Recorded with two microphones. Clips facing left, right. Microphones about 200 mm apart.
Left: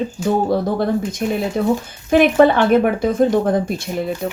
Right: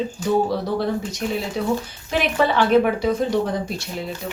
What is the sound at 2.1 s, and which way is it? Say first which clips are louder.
Speech: left 9 dB; 50° left (ahead or behind).